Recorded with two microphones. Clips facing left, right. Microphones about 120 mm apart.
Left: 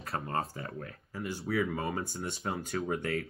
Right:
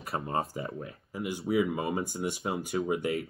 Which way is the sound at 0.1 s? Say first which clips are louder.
Right 3 dB; 20° right (ahead or behind).